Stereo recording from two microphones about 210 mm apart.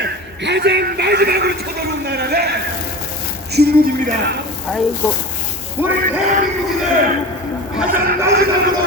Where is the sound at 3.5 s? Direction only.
50° right (ahead or behind).